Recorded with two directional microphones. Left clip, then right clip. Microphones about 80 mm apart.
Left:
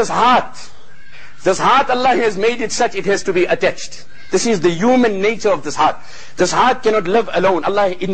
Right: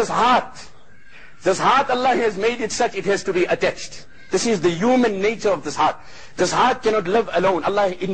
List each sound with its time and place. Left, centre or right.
0.0 s a man's voice: right